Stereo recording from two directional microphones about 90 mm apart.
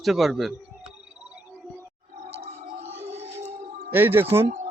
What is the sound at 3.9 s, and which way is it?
Speech, 25° right (ahead or behind).